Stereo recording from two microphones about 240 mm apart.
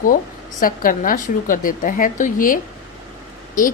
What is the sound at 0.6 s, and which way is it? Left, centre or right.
A woman's voice, left.